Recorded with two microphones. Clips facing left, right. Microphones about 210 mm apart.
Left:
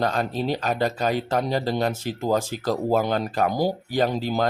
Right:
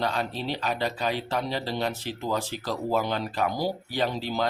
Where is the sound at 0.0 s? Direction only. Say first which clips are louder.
Left 5 dB; 45° left (ahead or behind).